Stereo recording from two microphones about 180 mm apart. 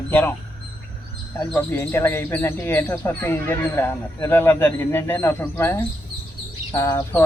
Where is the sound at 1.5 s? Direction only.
15° left (ahead or behind).